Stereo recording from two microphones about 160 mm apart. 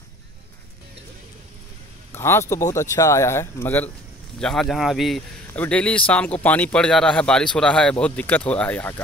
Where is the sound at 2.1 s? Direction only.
15° left (ahead or behind).